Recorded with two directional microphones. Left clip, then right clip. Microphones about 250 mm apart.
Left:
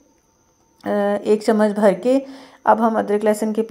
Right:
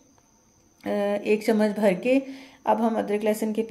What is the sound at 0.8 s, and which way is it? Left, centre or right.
A woman's voice, centre.